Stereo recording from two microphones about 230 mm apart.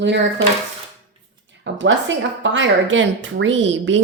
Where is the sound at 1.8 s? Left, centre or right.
Right.